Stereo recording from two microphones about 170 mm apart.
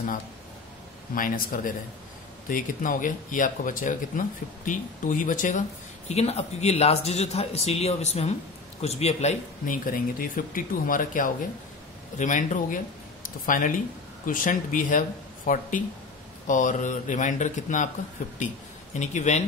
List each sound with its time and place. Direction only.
1.1 s speech: 55° left (ahead or behind)
6.0 s speech: 40° left (ahead or behind)
18.9 s speech: 45° left (ahead or behind)